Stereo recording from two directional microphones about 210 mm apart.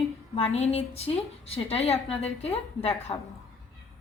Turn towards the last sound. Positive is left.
turn(degrees=30)  # may be behind; listen again after turning